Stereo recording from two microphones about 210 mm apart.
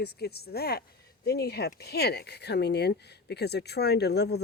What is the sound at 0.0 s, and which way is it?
Speech, 50° left (ahead or behind).